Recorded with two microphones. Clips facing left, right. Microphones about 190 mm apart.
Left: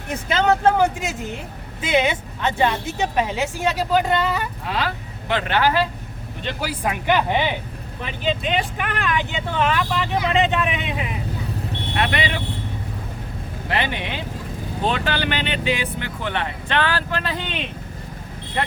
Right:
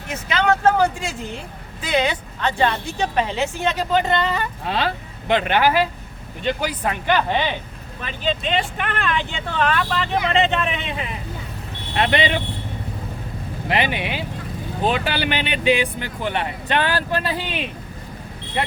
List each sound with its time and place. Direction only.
0.3 s speech: 25° left (ahead or behind)
2.6 s speech: 10° left (ahead or behind)
4.6 s speech: 30° right (ahead or behind)
6.4 s speech: centre (ahead or behind)
7.1 s speech: 15° left (ahead or behind)
11.9 s speech: 25° right (ahead or behind)
13.7 s speech: 15° right (ahead or behind)